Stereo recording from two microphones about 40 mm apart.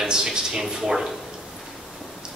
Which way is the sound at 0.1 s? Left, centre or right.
Centre.